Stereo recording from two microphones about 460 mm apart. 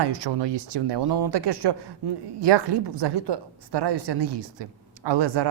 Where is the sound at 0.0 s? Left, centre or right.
Right.